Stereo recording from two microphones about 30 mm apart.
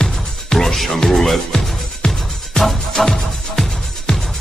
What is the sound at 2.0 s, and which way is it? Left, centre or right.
Music, left.